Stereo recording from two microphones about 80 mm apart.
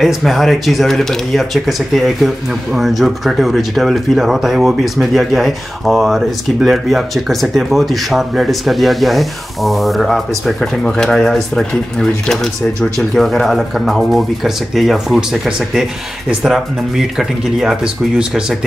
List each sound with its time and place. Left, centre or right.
0.0 s speech: centre